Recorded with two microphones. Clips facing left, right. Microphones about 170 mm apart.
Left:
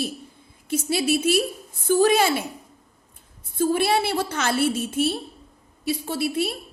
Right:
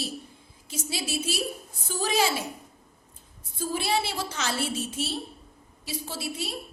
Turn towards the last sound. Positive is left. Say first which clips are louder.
# left 9 dB
turn(degrees=60)  # may be behind; listen again after turning